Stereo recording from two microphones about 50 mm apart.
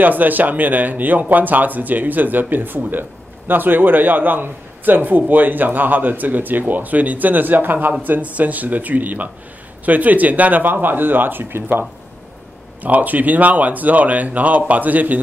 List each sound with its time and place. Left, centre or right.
0.0 s speech: right
12.8 s speech: right